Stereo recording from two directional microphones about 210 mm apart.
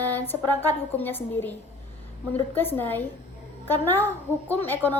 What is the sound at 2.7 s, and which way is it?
A child's voice, 10° left (ahead or behind).